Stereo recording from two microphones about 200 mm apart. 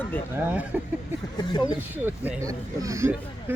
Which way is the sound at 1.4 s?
20° left (ahead or behind).